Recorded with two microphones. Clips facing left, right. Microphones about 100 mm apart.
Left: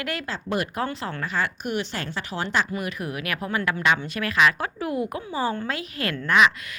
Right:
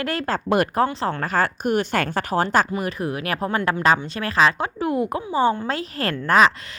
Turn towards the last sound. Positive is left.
turn(degrees=-35)  # may be behind; listen again after turning